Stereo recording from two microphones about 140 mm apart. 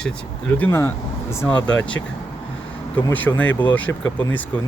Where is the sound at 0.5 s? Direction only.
15° left (ahead or behind).